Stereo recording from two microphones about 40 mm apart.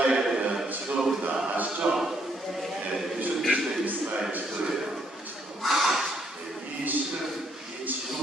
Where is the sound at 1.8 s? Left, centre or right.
Right.